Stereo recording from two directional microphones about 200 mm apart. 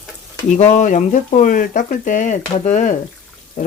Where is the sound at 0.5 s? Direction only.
40° left (ahead or behind).